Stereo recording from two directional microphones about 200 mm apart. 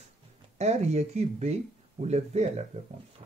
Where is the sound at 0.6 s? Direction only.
35° right (ahead or behind).